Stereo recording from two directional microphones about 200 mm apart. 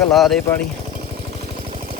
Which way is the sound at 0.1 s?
Centre (ahead or behind).